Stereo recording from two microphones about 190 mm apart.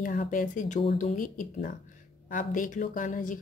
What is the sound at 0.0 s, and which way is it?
A woman's voice, 45° left (ahead or behind).